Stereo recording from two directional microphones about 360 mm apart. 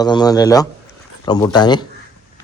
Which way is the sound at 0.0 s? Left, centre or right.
Centre.